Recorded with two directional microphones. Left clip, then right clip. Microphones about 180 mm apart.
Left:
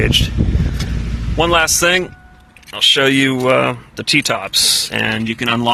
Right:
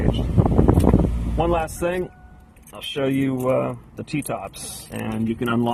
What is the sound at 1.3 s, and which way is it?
Speech, 20° left (ahead or behind).